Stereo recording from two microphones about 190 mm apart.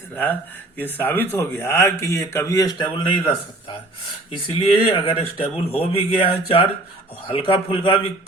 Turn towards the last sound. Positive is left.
turn(degrees=30)  # may be behind; listen again after turning